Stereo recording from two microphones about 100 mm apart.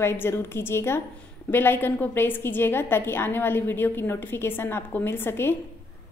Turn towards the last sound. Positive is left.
turn(degrees=25)  # may be behind; listen again after turning